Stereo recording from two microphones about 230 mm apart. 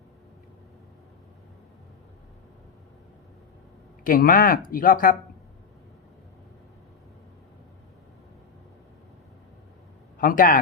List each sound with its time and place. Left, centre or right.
4.0 s speech: left
10.2 s speech: left